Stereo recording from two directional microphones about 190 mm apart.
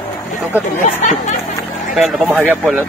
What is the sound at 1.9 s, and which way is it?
Speech, centre (ahead or behind).